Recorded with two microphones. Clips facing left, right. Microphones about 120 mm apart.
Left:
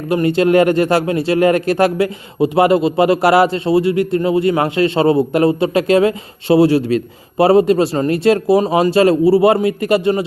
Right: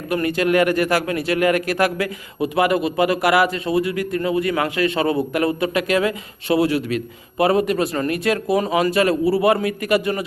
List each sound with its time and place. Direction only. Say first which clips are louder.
0.1 s a man's voice: left 6 dB; 30° left (ahead or behind)